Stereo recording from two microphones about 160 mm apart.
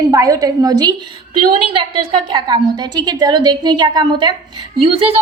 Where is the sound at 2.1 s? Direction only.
30° right (ahead or behind).